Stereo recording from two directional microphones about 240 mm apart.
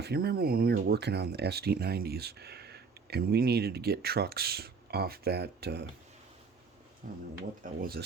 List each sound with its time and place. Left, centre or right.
0.0 s speech: right
7.0 s speech: right